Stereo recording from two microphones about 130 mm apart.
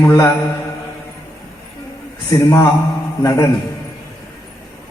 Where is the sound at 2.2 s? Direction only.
25° left (ahead or behind).